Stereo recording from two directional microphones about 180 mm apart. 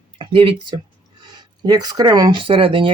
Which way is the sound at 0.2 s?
30° right (ahead or behind).